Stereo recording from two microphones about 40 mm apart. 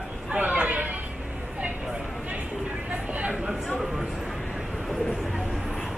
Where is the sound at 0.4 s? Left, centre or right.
Right.